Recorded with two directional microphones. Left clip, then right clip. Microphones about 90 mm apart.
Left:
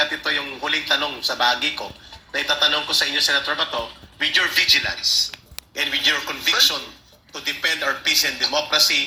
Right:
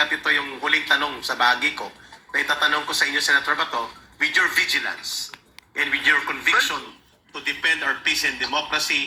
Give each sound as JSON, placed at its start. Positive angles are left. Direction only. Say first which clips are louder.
{"t": 0.0, "sound": "a man's voice", "louder": "right 1 dB", "side_deg": 20}